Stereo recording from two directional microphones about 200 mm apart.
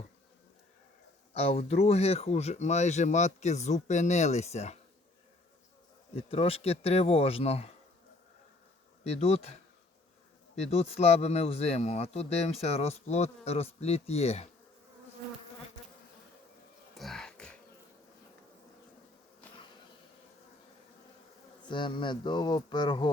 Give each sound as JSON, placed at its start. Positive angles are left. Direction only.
{"t": 1.3, "sound": "speech", "side_deg": 30}
{"t": 6.1, "sound": "speech", "side_deg": 30}
{"t": 9.0, "sound": "speech", "side_deg": 30}
{"t": 16.9, "sound": "a sound", "side_deg": 0}
{"t": 21.7, "sound": "speech", "side_deg": 25}